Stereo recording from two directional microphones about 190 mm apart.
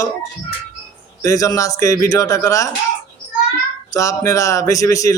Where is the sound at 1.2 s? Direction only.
15° left (ahead or behind).